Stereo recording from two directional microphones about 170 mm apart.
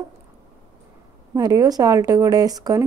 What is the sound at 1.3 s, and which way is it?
Speech, 20° right (ahead or behind).